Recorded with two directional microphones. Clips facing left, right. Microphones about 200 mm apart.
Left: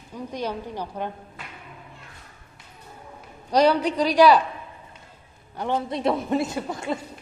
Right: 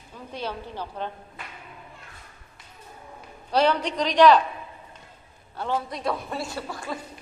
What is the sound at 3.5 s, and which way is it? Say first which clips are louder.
Speech: left 3 dB; 10° left (ahead or behind).